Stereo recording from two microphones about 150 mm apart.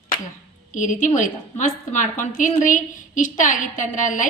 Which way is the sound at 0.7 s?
55° left (ahead or behind).